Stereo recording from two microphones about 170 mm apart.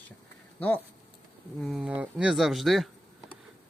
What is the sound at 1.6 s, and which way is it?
Speech, 5° right (ahead or behind).